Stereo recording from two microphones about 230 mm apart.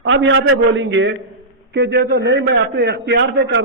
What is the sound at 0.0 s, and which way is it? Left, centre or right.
A man's voice, right.